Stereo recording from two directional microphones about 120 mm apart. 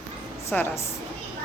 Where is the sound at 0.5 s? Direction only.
10° left (ahead or behind).